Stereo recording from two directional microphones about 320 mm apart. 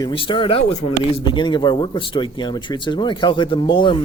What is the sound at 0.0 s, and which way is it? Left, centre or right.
Speech, centre.